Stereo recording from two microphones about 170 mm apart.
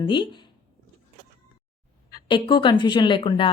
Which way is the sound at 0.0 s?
30° left (ahead or behind).